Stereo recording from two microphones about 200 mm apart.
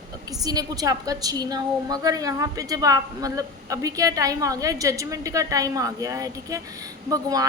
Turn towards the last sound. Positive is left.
turn(degrees=-20)  # may be behind; listen again after turning